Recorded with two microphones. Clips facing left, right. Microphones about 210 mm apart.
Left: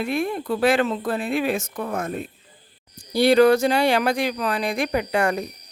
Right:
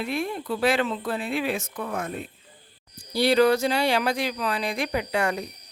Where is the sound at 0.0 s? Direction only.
50° left (ahead or behind).